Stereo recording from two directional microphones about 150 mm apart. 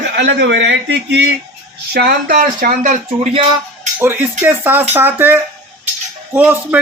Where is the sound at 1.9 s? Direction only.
90° right; by 3.3 s 60° right (ahead or behind).